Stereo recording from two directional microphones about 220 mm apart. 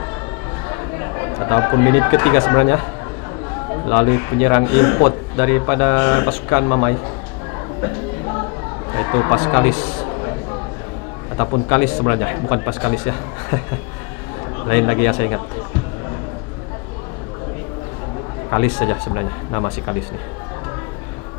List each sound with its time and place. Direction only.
0.7 s speech: 20° left (ahead or behind)
3.8 s speech: 25° left (ahead or behind)
8.9 s speech: 20° left (ahead or behind)
11.3 s speech: 25° left (ahead or behind)
14.6 s speech: 20° left (ahead or behind)
18.5 s speech: 20° left (ahead or behind)